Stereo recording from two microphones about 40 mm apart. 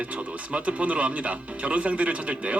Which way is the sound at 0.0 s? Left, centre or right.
Right.